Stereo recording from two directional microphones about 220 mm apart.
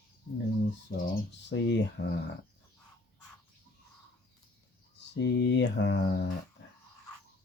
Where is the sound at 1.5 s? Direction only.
55° left (ahead or behind).